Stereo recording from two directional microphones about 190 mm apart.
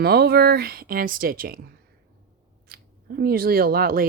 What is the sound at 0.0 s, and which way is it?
Speech, 55° right (ahead or behind).